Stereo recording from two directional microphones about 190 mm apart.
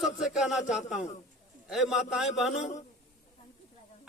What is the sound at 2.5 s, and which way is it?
Speech, 35° left (ahead or behind).